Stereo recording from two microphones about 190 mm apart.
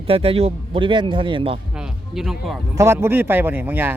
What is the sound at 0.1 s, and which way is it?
Speech, 30° right (ahead or behind).